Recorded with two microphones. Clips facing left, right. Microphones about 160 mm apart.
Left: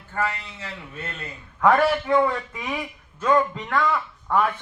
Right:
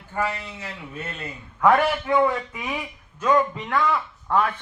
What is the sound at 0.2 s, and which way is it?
A man's voice, 10° right (ahead or behind).